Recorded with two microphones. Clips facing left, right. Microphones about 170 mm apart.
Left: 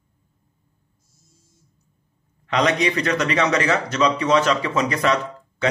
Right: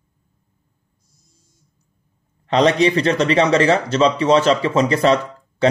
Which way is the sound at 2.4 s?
30° right (ahead or behind).